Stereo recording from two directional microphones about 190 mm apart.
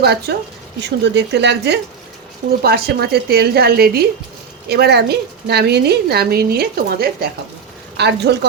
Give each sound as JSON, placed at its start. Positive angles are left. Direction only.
{"t": 0.0, "sound": "a woman's voice", "side_deg": -60}
{"t": 7.9, "sound": "a woman's voice", "side_deg": -65}